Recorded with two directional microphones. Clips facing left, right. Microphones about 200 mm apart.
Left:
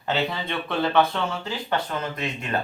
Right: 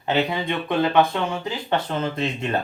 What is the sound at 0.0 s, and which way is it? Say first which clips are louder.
Speech: right 4 dB; 15° right (ahead or behind).